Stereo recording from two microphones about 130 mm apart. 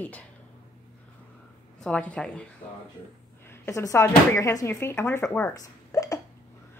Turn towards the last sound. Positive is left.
turn(degrees=25)  # may be behind; listen again after turning